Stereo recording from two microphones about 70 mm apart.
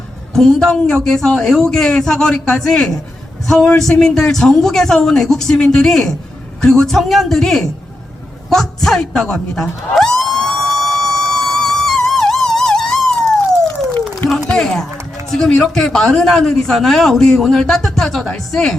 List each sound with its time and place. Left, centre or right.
0.3 s a man's voice: centre
8.4 s a sound: centre
14.5 s speech: centre